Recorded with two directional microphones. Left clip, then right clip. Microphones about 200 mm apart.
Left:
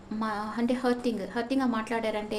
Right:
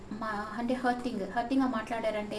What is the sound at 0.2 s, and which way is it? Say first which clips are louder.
A woman's voice: left 4 dB; 60° left (ahead or behind).